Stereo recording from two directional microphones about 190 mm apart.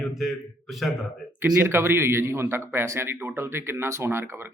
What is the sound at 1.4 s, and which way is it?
A man's voice, 10° right (ahead or behind).